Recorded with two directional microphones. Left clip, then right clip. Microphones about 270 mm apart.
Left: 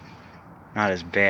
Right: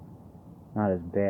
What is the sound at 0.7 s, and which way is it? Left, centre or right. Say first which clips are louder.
Speech: left 5 dB; centre.